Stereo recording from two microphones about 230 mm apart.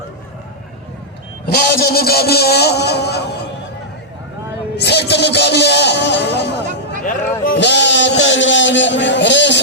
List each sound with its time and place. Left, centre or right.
1.5 s a man's voice: left
4.8 s music: left
7.0 s a sound: left